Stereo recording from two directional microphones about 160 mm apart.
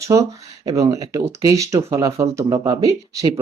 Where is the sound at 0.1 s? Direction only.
25° right (ahead or behind).